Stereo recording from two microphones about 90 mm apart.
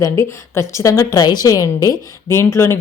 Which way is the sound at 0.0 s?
35° left (ahead or behind).